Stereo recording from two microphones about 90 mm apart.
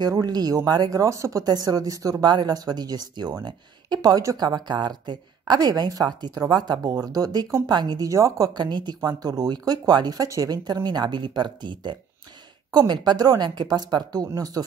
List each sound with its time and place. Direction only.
0.0 s speech: 45° right (ahead or behind)
8.1 s speech: 40° right (ahead or behind)
8.5 s speech: 55° right (ahead or behind)